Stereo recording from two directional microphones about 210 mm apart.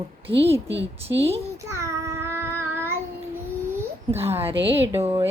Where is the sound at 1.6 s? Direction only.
15° right (ahead or behind).